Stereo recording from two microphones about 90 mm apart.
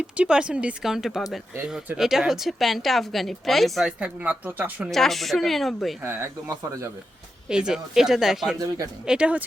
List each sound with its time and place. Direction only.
0.2 s a woman's voice: 10° right (ahead or behind)
3.8 s speech: 10° right (ahead or behind)
4.9 s a woman's voice: 5° left (ahead or behind)
6.0 s speech: 30° right (ahead or behind)
7.4 s a woman's voice: 10° right (ahead or behind)
8.5 s speech: 45° right (ahead or behind)
9.0 s speech: 10° right (ahead or behind)